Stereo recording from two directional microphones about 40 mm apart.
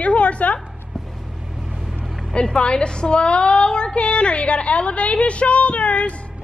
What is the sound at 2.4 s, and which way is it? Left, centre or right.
A woman's voice, left.